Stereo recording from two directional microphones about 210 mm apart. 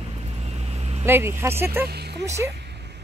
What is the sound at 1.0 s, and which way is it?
Speech, 10° right (ahead or behind).